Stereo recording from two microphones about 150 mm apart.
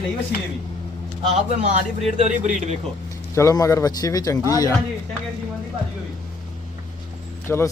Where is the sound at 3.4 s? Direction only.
20° left (ahead or behind).